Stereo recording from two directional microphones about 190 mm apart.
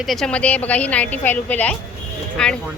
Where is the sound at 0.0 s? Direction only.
Centre (ahead or behind).